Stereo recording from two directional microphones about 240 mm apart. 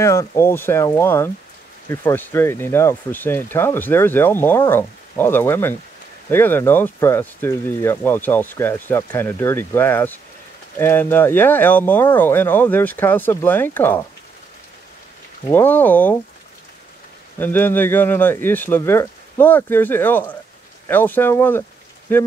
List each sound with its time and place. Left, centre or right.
0.0 s speech: centre
15.5 s speech: centre
17.4 s speech: centre